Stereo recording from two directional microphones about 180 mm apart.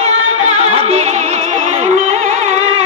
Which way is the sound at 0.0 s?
40° right (ahead or behind).